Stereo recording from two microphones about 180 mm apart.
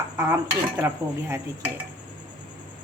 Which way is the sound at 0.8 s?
15° right (ahead or behind).